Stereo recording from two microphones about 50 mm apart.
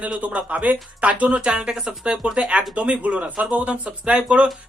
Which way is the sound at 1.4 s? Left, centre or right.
Centre.